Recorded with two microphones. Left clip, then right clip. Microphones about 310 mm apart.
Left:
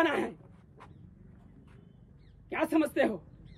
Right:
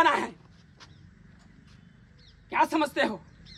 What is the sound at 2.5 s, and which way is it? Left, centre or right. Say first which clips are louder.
Speech: right 4 dB; centre.